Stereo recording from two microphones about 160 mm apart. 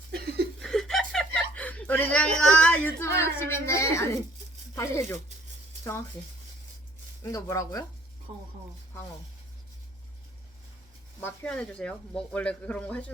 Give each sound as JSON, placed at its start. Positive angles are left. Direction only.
{"t": 0.1, "sound": "chuckle", "side_deg": -80}
{"t": 0.6, "sound": "chuckle", "side_deg": 5}
{"t": 3.2, "sound": "speech", "side_deg": 15}
{"t": 7.2, "sound": "speech", "side_deg": 20}
{"t": 11.2, "sound": "speech", "side_deg": 10}